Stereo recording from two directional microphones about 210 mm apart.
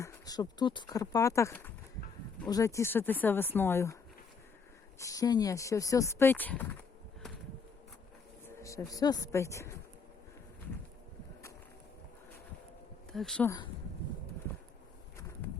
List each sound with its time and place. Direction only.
0.0 s speech: 15° left (ahead or behind)
4.9 s speech: 15° left (ahead or behind)
8.4 s speech: 15° left (ahead or behind)
13.1 s speech: 5° left (ahead or behind)